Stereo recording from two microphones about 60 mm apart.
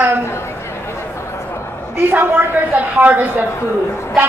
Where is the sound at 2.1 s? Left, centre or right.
Right.